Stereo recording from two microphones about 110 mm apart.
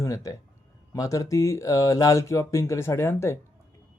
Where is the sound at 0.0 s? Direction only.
30° left (ahead or behind).